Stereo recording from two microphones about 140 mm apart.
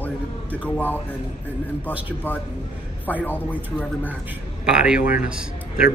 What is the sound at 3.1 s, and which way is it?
Speech, 10° right (ahead or behind).